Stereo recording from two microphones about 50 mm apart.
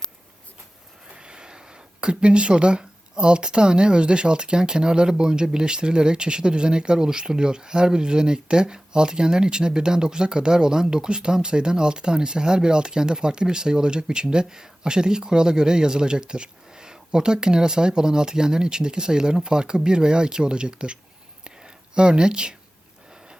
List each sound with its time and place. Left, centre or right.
1.1 s speech: centre
21.4 s whispering: centre